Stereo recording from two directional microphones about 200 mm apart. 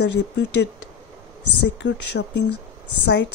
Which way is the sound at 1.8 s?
60° left (ahead or behind).